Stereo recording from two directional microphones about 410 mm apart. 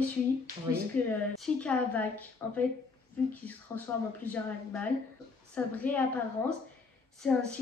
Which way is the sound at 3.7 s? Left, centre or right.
Centre.